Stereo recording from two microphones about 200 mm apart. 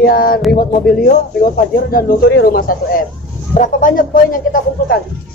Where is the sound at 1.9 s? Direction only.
45° left (ahead or behind).